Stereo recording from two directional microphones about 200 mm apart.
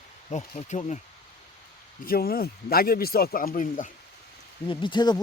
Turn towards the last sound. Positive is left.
turn(degrees=20)  # may be behind; listen again after turning